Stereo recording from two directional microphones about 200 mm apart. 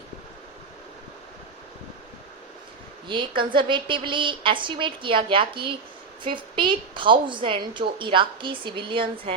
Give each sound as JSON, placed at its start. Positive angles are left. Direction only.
{"t": 3.1, "sound": "a woman's voice", "side_deg": -25}